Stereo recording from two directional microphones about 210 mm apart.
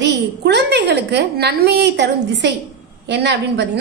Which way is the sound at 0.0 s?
55° right (ahead or behind).